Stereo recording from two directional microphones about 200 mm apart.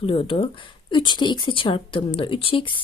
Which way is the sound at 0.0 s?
30° left (ahead or behind).